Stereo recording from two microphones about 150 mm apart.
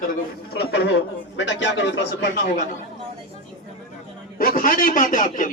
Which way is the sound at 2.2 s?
90° left.